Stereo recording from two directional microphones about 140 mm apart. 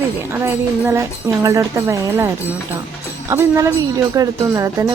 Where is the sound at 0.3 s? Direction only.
15° right (ahead or behind).